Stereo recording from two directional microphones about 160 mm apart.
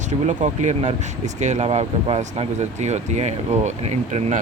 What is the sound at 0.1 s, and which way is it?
Speech, 50° right (ahead or behind).